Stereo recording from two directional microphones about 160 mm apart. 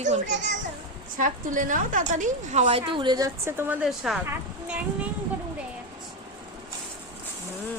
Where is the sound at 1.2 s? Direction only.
55° right (ahead or behind).